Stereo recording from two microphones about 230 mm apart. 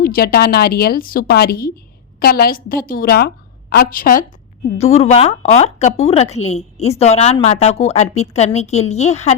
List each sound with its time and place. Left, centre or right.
0.0 s a woman's voice: left